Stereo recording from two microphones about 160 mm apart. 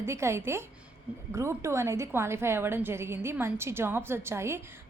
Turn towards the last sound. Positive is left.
turn(degrees=-15)  # may be behind; listen again after turning